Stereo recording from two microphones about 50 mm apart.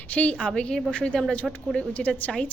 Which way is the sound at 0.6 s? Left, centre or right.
Centre.